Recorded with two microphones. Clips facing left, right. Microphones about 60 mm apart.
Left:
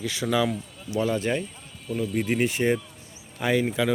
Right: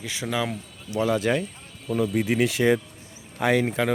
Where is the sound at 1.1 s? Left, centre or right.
Right.